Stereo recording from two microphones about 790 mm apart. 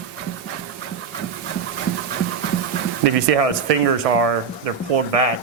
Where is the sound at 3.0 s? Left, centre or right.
Right.